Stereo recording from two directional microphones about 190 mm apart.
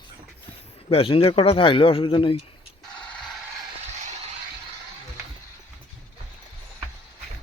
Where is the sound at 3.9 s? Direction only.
35° right (ahead or behind).